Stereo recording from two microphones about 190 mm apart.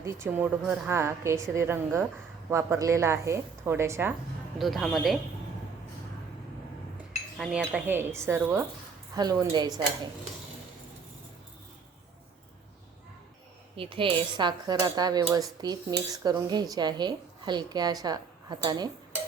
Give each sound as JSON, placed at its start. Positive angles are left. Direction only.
{"t": 0.0, "sound": "a woman's voice", "side_deg": -15}
{"t": 4.5, "sound": "speech", "side_deg": 0}
{"t": 7.3, "sound": "a woman's voice", "side_deg": -5}
{"t": 13.7, "sound": "speech", "side_deg": -25}